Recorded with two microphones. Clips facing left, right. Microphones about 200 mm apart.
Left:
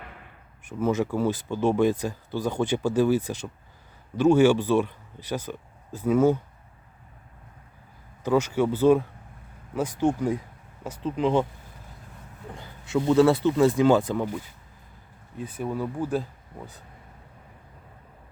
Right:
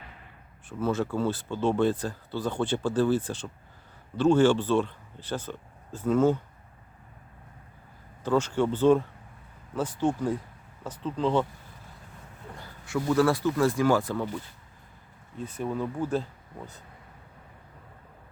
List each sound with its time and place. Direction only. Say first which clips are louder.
0.7 s speech: left 3 dB; 20° left (ahead or behind)
8.2 s speech: left 2 dB; 10° left (ahead or behind)
12.5 s speech: left 5 dB; 20° left (ahead or behind)
15.4 s speech: left 1 dB; 10° left (ahead or behind)